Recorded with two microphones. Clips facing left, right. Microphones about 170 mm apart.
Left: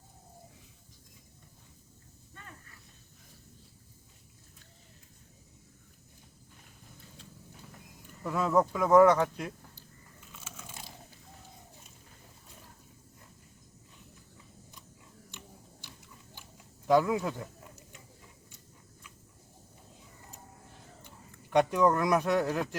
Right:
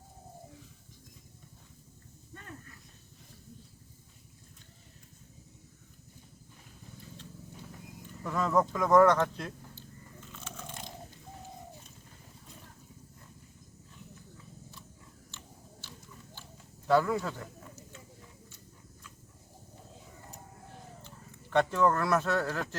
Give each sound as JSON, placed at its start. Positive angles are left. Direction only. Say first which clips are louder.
{"t": 8.2, "sound": "speech", "louder": "left 1 dB", "side_deg": 10}
{"t": 10.2, "sound": "biting", "louder": "right 4 dB", "side_deg": 5}
{"t": 15.3, "sound": "a sound", "louder": "left 2 dB", "side_deg": 15}
{"t": 21.5, "sound": "speech", "louder": "left 2 dB", "side_deg": 15}